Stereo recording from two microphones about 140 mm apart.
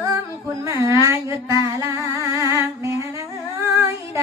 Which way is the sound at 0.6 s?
25° right (ahead or behind).